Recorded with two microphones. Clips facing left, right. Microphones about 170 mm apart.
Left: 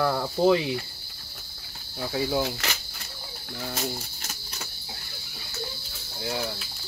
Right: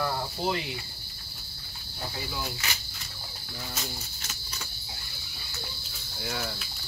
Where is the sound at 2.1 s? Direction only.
90° left.